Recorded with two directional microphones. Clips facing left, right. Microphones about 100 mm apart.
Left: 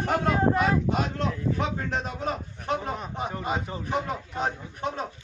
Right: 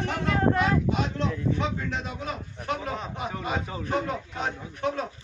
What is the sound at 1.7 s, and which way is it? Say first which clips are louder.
A man's voice: left 2 dB; 45° left (ahead or behind).